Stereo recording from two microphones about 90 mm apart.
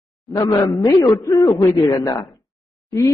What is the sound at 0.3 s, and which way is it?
A man's voice, 40° left (ahead or behind).